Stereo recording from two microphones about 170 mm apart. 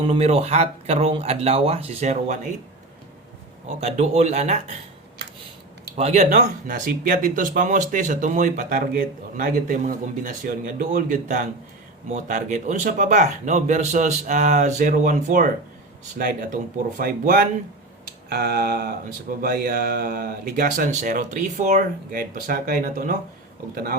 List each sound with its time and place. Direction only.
0.0 s speech: 35° right (ahead or behind)
3.8 s speech: 40° right (ahead or behind)
6.0 s speech: 40° right (ahead or behind); by 17.4 s 60° right (ahead or behind)
18.3 s speech: 70° right (ahead or behind); by 23.1 s 50° right (ahead or behind)
23.7 s speech: 60° right (ahead or behind)